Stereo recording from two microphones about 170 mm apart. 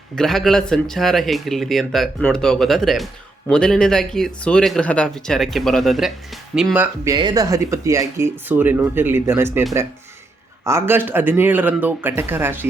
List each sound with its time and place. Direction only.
0.2 s speech: centre (ahead or behind)
7.1 s speech: 25° right (ahead or behind)